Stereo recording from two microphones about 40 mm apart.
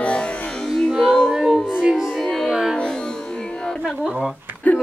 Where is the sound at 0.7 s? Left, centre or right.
Centre.